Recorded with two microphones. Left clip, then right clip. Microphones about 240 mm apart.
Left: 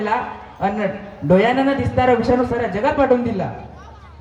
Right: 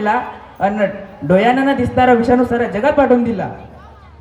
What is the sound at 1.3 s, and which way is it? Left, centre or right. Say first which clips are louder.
Speech: right 3 dB; right.